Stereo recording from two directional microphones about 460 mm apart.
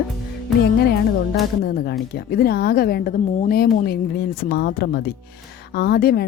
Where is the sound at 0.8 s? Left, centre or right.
Left.